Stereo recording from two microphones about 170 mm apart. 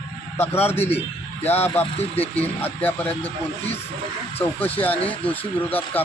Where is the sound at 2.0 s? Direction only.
35° left (ahead or behind).